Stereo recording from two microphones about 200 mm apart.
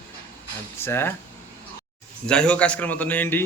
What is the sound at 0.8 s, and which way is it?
Speech, 10° left (ahead or behind).